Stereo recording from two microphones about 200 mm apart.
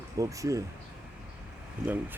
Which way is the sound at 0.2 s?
15° right (ahead or behind).